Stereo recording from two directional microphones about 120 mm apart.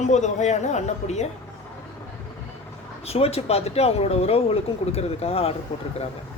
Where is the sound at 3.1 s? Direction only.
55° left (ahead or behind).